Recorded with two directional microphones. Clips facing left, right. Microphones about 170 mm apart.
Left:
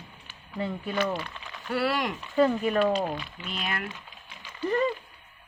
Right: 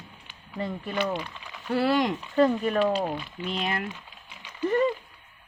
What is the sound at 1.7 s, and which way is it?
Speech, 25° right (ahead or behind).